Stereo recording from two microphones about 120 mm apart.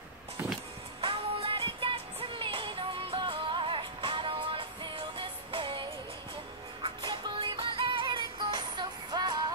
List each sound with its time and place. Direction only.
1.0 s music: 45° right (ahead or behind)